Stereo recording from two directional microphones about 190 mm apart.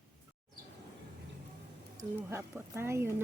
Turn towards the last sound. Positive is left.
turn(degrees=-15)  # may be behind; listen again after turning